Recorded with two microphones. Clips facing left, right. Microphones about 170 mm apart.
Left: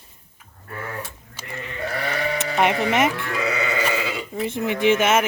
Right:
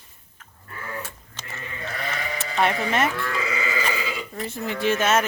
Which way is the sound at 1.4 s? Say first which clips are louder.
Left 3 dB; 10° left (ahead or behind).